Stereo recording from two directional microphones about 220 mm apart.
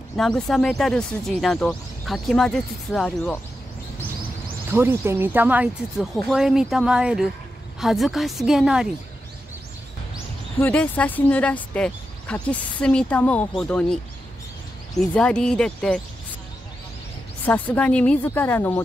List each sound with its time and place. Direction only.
0.1 s speech: centre (ahead or behind)
4.6 s speech: 10° right (ahead or behind)
10.6 s speech: 5° left (ahead or behind)
15.0 s speech: 5° left (ahead or behind)
17.5 s a woman's voice: 5° left (ahead or behind)